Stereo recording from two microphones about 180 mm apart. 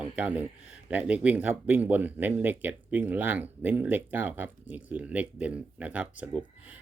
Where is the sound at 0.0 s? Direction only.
10° right (ahead or behind).